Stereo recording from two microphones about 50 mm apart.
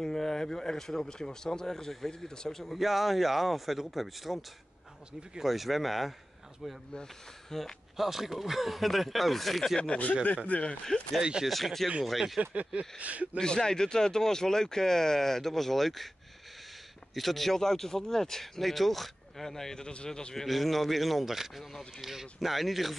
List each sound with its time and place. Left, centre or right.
0.0 s speech: centre
2.6 s speech: centre
6.9 s speech: centre
9.8 s speech: left
11.1 s speech: centre
11.4 s speech: centre
12.4 s speech: right
13.4 s speech: centre
17.1 s speech: centre
20.4 s speech: centre